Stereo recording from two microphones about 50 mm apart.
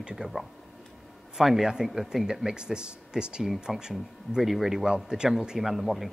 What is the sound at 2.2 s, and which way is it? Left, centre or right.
Speech, centre.